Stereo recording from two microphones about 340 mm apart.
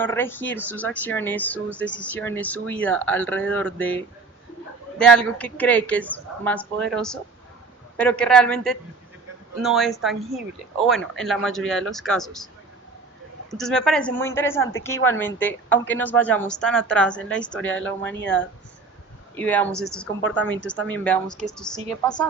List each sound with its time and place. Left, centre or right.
0.0 s speech: centre
4.9 s speech: centre
13.5 s speech: centre
14.6 s a woman's voice: left
14.8 s speech: centre
19.4 s speech: centre
20.6 s a woman's voice: left
20.8 s speech: centre